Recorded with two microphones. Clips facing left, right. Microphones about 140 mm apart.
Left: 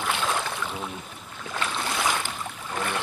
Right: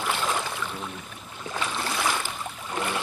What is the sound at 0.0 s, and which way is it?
Boat, centre (ahead or behind).